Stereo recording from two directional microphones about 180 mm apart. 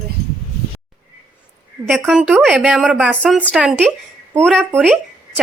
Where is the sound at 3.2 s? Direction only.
5° left (ahead or behind).